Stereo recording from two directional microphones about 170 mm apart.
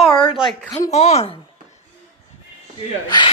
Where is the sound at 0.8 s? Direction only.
40° left (ahead or behind).